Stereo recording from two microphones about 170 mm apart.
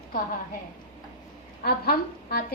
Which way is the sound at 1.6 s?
65° left (ahead or behind).